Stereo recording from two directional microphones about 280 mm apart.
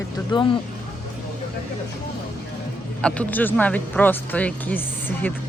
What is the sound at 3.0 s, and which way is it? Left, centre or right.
Speech, centre.